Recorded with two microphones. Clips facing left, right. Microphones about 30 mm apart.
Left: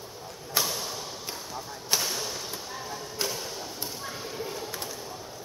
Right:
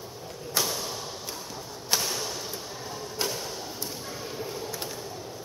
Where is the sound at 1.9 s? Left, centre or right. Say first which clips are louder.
Even; centre.